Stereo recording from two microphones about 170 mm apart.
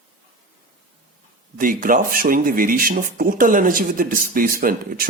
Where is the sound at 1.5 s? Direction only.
55° right (ahead or behind).